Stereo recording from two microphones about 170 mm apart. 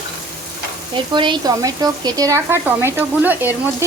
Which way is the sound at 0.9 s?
30° right (ahead or behind).